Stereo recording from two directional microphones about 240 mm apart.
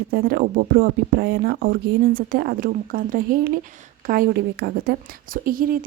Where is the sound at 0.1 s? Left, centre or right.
Right.